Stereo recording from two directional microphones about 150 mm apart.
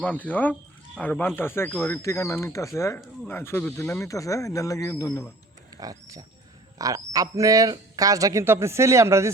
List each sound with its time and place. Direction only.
0.0 s speech: 10° left (ahead or behind)
5.7 s a sound: 25° right (ahead or behind)
6.7 s speech: 25° right (ahead or behind)